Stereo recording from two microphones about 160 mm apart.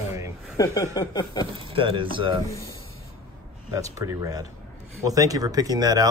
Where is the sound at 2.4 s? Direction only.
20° left (ahead or behind).